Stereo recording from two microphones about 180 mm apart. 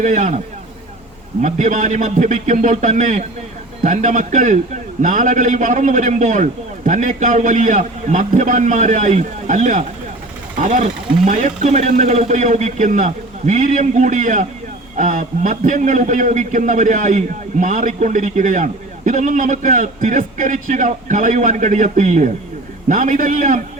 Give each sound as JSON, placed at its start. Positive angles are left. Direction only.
{"t": 0.0, "sound": "a man's voice", "side_deg": -45}
{"t": 1.4, "sound": "a man's voice", "side_deg": -45}